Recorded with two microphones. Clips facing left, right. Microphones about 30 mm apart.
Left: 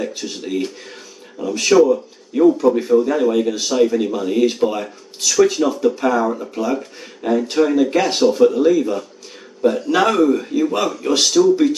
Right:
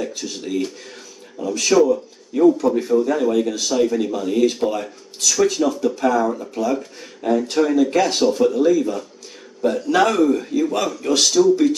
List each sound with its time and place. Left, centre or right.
0.0 s speech: centre